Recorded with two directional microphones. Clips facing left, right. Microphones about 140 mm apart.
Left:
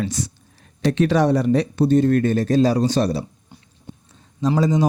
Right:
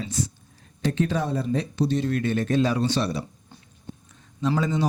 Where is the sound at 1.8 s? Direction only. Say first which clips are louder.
Left 9 dB; 50° left (ahead or behind).